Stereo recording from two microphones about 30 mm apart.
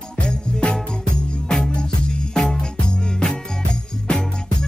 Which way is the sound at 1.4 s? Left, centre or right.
Centre.